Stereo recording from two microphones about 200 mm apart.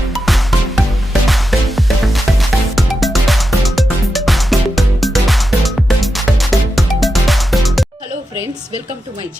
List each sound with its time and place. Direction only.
0.1 s music: centre (ahead or behind)